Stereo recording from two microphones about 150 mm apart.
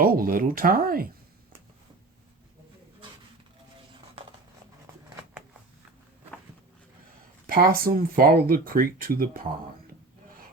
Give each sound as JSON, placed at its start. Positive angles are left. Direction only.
{"t": 0.0, "sound": "speech", "side_deg": -75}
{"t": 7.4, "sound": "speech", "side_deg": -75}